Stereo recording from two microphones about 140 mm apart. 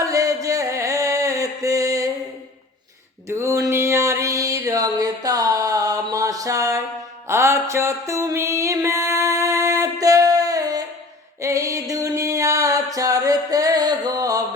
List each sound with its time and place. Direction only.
0.0 s music: 25° right (ahead or behind)
3.2 s a sound: 20° right (ahead or behind)
7.3 s music: 20° right (ahead or behind)